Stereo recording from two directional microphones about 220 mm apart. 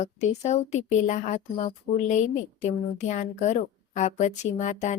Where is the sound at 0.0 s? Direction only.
30° left (ahead or behind).